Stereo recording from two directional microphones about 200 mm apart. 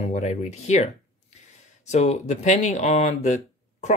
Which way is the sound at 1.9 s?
35° left (ahead or behind).